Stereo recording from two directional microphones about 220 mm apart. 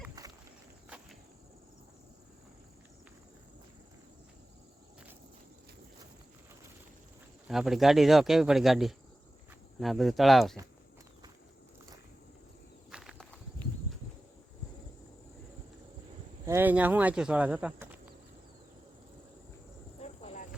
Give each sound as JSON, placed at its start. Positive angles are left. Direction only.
{"t": 0.2, "sound": "rowboat", "side_deg": -15}
{"t": 7.4, "sound": "speech", "side_deg": 0}
{"t": 12.9, "sound": "walk", "side_deg": 0}
{"t": 16.5, "sound": "speech", "side_deg": -10}
{"t": 20.0, "sound": "a sound", "side_deg": 30}